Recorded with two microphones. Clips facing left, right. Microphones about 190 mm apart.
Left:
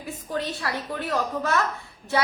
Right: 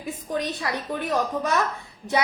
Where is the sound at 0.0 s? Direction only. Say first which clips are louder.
Right 2 dB; 15° right (ahead or behind).